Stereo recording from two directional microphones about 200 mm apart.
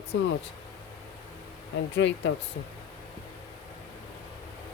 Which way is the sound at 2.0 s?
60° left (ahead or behind).